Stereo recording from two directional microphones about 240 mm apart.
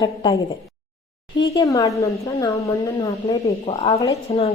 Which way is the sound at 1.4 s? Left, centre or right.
Centre.